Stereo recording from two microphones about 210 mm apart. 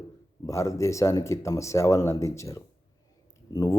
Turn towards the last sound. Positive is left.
turn(degrees=15)  # may be behind; listen again after turning